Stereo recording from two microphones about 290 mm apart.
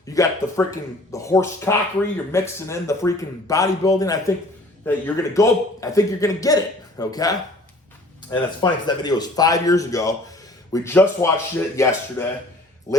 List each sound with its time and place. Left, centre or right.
0.1 s speech: centre